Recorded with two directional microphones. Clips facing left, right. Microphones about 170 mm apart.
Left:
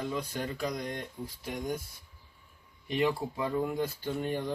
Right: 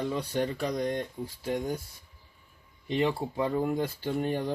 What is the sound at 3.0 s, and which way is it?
Speech, 30° right (ahead or behind).